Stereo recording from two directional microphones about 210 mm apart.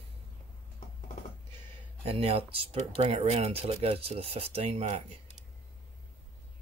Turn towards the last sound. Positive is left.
turn(degrees=-30)  # may be behind; listen again after turning